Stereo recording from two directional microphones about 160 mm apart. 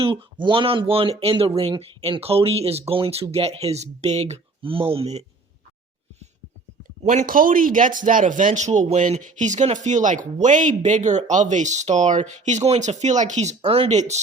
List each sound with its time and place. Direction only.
0.0 s speech: 30° right (ahead or behind)
7.0 s a man's voice: 50° right (ahead or behind)